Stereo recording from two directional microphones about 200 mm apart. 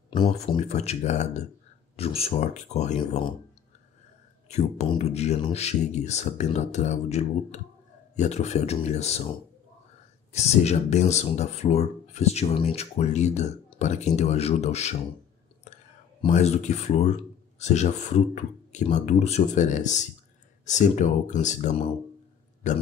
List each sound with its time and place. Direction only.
0.2 s speech: 25° left (ahead or behind)
4.5 s speech: 35° left (ahead or behind)
10.3 s speech: 35° left (ahead or behind)
16.3 s speech: 35° left (ahead or behind)